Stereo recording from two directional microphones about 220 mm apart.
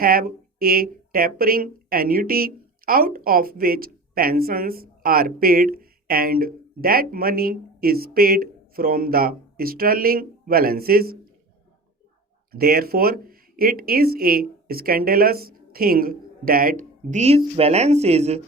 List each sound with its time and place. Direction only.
0.0 s speech: 40° right (ahead or behind)
12.5 s speech: 45° right (ahead or behind)